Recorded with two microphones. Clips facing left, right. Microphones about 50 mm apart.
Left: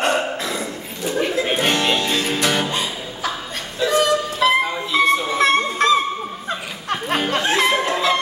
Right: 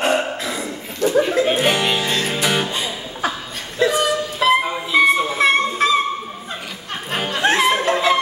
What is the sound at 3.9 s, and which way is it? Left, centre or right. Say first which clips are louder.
Music: left 2 dB; centre.